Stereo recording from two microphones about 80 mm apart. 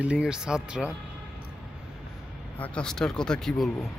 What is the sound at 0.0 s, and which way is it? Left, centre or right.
Speech, centre.